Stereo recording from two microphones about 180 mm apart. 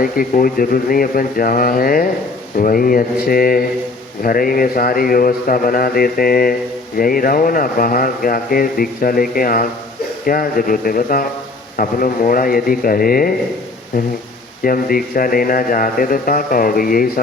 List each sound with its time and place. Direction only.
0.0 s speech: 55° left (ahead or behind)